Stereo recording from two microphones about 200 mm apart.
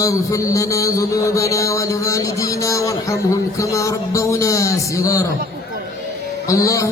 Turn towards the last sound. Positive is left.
turn(degrees=15)  # may be behind; listen again after turning